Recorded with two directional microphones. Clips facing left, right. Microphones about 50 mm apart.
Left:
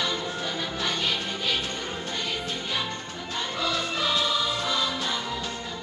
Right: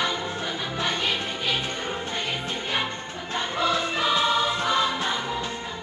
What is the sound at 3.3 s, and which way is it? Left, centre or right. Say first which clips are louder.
Music: right 4 dB; right.